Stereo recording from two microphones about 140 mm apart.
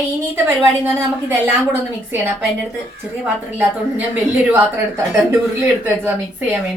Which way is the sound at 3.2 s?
10° right (ahead or behind).